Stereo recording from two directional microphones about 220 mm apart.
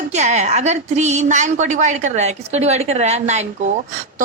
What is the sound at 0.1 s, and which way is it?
Speech, 30° right (ahead or behind).